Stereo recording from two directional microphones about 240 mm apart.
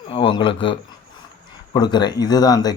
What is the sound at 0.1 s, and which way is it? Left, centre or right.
Speech, left.